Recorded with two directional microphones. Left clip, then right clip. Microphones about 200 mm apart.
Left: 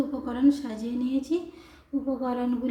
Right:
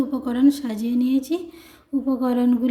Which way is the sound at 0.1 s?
45° right (ahead or behind).